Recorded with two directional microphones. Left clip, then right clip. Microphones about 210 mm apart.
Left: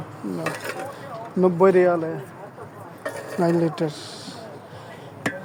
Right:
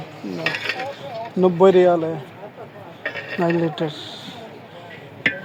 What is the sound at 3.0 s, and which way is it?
Dishes, 20° left (ahead or behind).